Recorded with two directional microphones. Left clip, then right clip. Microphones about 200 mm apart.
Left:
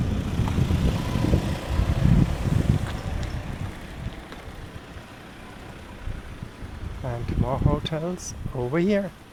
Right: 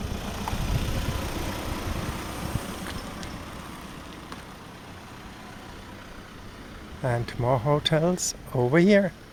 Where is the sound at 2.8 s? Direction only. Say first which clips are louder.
Left 1 dB; 55° right (ahead or behind).